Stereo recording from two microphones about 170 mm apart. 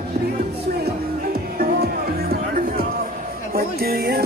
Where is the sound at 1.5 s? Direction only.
65° right (ahead or behind).